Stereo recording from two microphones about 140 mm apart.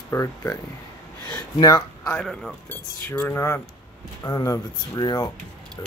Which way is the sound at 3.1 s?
15° left (ahead or behind).